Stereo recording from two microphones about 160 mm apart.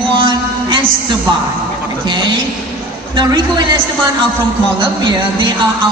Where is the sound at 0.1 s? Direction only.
30° right (ahead or behind).